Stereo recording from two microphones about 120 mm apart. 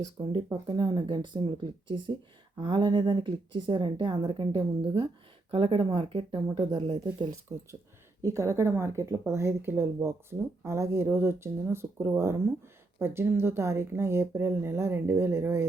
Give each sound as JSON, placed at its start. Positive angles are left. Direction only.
{"t": 0.2, "sound": "a woman's voice", "side_deg": -45}
{"t": 7.5, "sound": "speech", "side_deg": -25}